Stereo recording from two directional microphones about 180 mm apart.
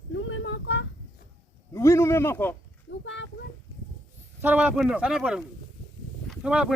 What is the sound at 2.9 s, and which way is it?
Speech, 90° left.